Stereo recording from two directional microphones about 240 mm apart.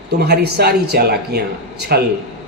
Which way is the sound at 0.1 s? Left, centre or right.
Right.